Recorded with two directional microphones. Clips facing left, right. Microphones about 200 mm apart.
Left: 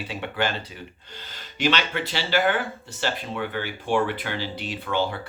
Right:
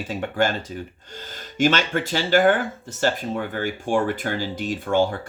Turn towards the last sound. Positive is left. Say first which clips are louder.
# right 5 dB
turn(degrees=-45)  # may be behind; listen again after turning